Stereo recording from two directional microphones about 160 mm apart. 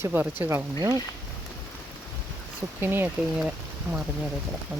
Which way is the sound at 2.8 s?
15° right (ahead or behind).